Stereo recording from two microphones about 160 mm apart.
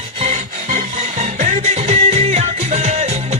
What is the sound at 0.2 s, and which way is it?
Rub, 45° right (ahead or behind).